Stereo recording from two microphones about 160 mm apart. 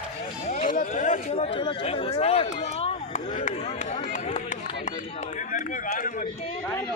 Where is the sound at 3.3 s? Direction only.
55° left (ahead or behind).